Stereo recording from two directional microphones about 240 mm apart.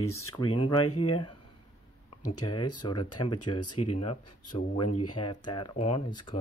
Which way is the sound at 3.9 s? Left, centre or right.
Left.